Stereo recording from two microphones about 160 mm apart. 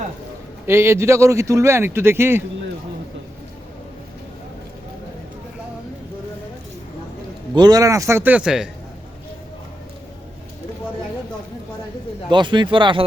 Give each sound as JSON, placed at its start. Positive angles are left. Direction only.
{"t": 0.7, "sound": "speech", "side_deg": -15}
{"t": 7.5, "sound": "speech", "side_deg": -25}
{"t": 12.3, "sound": "speech", "side_deg": -30}